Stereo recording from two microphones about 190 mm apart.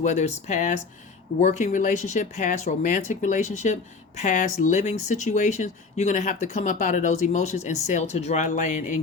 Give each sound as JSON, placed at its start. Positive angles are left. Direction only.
{"t": 0.0, "sound": "speech", "side_deg": 35}